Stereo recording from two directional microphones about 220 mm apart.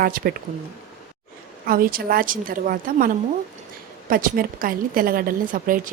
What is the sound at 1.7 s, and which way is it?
A woman's voice, 40° right (ahead or behind).